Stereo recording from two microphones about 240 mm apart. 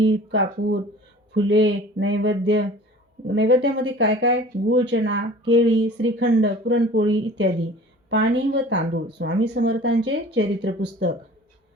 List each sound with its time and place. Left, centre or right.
0.0 s speech: right